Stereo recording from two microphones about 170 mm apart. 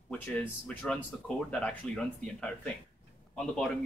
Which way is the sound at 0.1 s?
10° left (ahead or behind).